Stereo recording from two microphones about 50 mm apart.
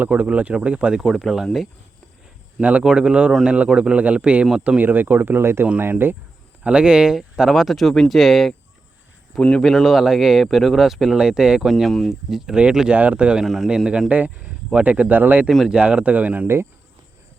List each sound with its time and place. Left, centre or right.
0.1 s speech: right
0.9 s speech: centre
2.6 s speech: right
2.8 s speech: centre
4.8 s speech: right
6.7 s speech: centre
9.4 s speech: centre
9.6 s speech: centre
11.6 s speech: centre
12.9 s speech: right
13.4 s speech: centre
13.7 s speech: centre
14.1 s speech: right
15.8 s speech: right